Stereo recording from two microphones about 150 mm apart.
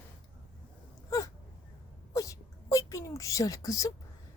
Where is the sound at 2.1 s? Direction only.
20° left (ahead or behind).